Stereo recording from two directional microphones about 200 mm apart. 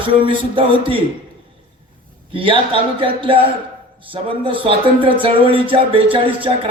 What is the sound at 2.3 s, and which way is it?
Speech, 25° right (ahead or behind).